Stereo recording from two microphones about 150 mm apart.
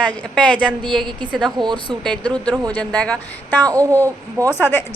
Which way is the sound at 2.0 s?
5° left (ahead or behind).